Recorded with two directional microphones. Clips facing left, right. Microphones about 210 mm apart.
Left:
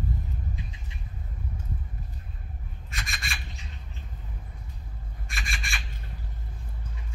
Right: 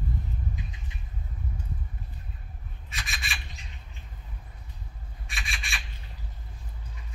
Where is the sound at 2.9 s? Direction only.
Centre (ahead or behind).